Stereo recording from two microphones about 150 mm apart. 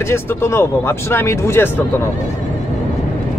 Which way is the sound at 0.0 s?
15° left (ahead or behind).